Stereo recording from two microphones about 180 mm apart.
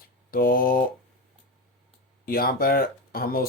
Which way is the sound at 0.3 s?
55° left (ahead or behind).